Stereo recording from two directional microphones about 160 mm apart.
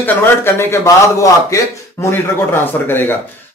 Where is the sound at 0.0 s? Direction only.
15° left (ahead or behind).